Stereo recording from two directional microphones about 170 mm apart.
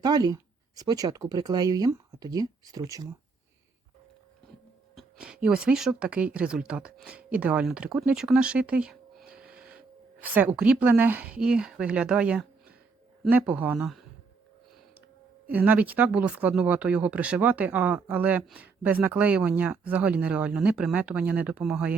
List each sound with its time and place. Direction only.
0.0 s speech: 20° right (ahead or behind)
4.9 s speech: 5° right (ahead or behind)
15.5 s speech: 10° right (ahead or behind)